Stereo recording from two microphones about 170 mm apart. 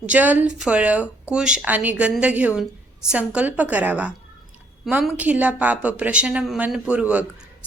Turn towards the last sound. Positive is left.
turn(degrees=-5)  # may be behind; listen again after turning